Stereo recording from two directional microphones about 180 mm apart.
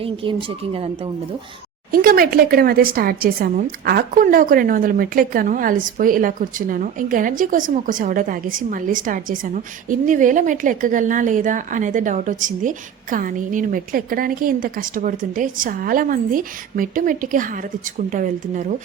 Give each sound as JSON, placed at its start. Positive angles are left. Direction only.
{"t": 0.0, "sound": "speech", "side_deg": -30}
{"t": 1.9, "sound": "a woman's voice", "side_deg": -55}